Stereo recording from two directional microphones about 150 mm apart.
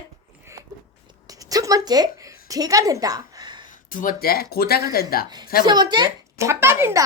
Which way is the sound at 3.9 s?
65° left (ahead or behind).